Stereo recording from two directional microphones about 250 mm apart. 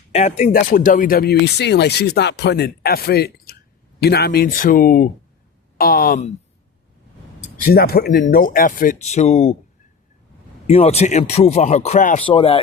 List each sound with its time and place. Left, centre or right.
0.1 s speech: left
7.5 s speech: left
10.7 s speech: left